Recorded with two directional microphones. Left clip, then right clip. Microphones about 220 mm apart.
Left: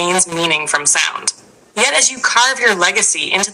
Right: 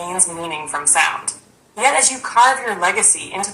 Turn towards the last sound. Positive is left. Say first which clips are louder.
# left 5 dB
turn(degrees=35)  # may be behind; listen again after turning